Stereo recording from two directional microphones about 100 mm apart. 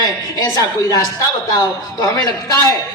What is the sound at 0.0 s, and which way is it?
A woman's voice, 40° left (ahead or behind).